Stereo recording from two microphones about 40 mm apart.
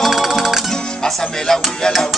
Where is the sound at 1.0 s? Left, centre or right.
Centre.